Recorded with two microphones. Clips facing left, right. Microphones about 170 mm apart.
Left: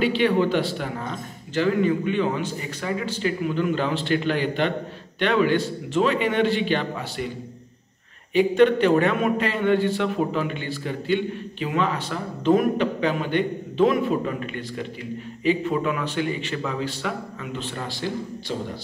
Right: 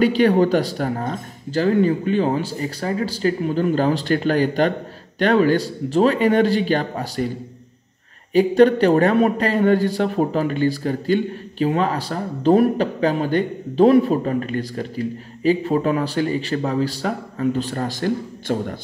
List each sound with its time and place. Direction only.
0.0 s a man's voice: 40° right (ahead or behind)
8.3 s a man's voice: 40° right (ahead or behind)